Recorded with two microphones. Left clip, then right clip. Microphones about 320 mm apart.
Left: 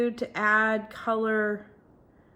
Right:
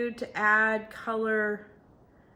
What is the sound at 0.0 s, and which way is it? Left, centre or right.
Speech, centre.